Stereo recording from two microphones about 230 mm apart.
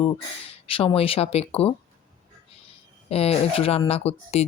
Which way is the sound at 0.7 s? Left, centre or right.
Left.